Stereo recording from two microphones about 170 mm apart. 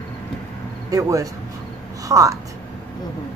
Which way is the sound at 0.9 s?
20° right (ahead or behind).